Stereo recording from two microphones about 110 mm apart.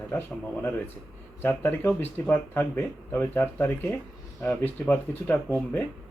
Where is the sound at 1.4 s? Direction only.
20° left (ahead or behind).